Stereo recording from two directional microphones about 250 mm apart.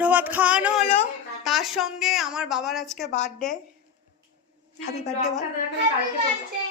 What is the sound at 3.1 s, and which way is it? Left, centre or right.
Speech, left.